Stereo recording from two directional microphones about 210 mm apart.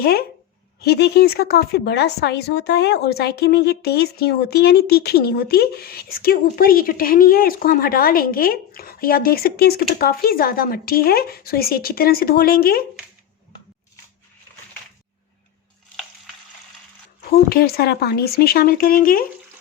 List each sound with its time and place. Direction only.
0.0 s speech: 50° left (ahead or behind)
17.2 s speech: 45° left (ahead or behind)